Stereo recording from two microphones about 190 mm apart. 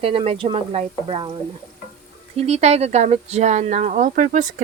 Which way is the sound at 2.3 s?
35° right (ahead or behind).